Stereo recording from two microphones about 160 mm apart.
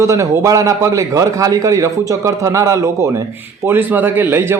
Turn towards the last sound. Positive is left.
turn(degrees=-15)  # may be behind; listen again after turning